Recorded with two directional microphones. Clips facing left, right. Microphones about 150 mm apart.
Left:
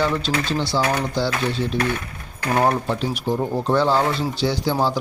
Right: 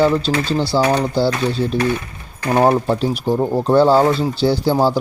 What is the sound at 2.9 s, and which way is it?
Speech, 40° right (ahead or behind).